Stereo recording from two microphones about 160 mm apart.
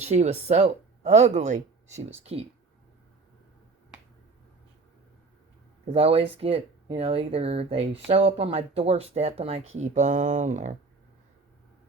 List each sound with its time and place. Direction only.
0.0 s speech: 40° right (ahead or behind)
5.9 s speech: 40° right (ahead or behind)